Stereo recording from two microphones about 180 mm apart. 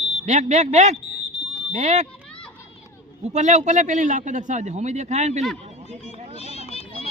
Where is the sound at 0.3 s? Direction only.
40° right (ahead or behind).